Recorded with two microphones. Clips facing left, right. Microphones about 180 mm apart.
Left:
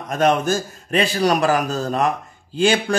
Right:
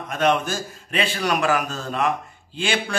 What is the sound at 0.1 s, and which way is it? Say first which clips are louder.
A man's voice: left 4 dB; 40° left (ahead or behind).